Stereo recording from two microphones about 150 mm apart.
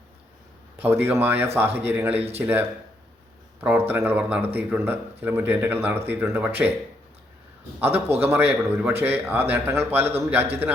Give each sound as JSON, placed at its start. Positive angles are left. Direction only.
{"t": 0.8, "sound": "a man's voice", "side_deg": -15}
{"t": 7.8, "sound": "a man's voice", "side_deg": -15}